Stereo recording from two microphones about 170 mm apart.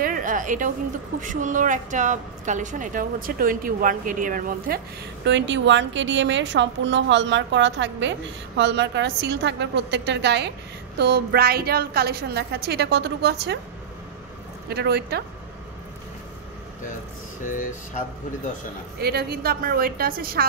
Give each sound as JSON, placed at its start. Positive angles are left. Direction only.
{"t": 0.0, "sound": "a woman's voice", "side_deg": -50}
{"t": 11.0, "sound": "a woman's voice", "side_deg": -65}
{"t": 14.7, "sound": "a woman's voice", "side_deg": -70}
{"t": 18.9, "sound": "a woman's voice", "side_deg": -70}